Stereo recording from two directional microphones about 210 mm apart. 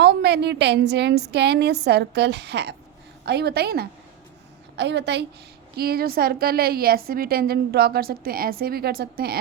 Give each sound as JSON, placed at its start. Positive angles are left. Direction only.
{"t": 0.0, "sound": "a woman's voice", "side_deg": -55}